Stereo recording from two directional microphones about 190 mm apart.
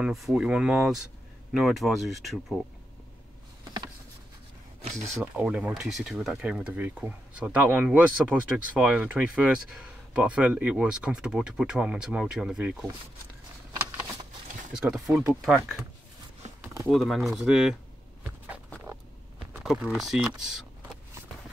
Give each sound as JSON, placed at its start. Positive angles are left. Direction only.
{"t": 0.0, "sound": "speech", "side_deg": 0}
{"t": 5.0, "sound": "speech", "side_deg": -5}
{"t": 14.8, "sound": "speech", "side_deg": 0}
{"t": 16.4, "sound": "a sound", "side_deg": -35}
{"t": 16.9, "sound": "speech", "side_deg": 0}
{"t": 19.6, "sound": "speech", "side_deg": 0}